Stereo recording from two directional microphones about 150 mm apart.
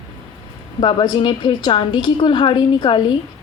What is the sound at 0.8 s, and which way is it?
Speech, 30° left (ahead or behind).